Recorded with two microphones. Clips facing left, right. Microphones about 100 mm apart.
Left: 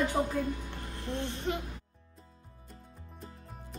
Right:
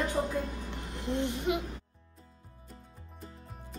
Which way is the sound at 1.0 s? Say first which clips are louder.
Right 4 dB; 15° right (ahead or behind).